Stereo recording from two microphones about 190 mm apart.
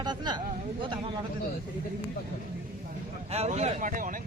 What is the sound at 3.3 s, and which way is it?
Speech, 35° right (ahead or behind).